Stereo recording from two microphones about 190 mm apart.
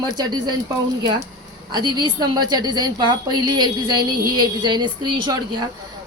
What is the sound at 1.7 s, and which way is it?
A woman's voice, 25° right (ahead or behind).